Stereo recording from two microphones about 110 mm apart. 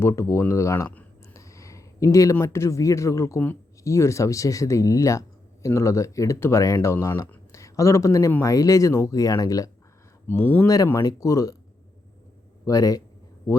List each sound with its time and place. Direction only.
0.0 s speech: 25° left (ahead or behind)
1.3 s a sound: 30° left (ahead or behind)
2.3 s speech: 25° left (ahead or behind)
10.2 s speech: 20° left (ahead or behind)
12.6 s speech: 30° left (ahead or behind)